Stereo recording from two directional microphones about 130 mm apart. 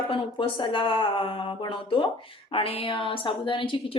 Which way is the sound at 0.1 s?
40° left (ahead or behind).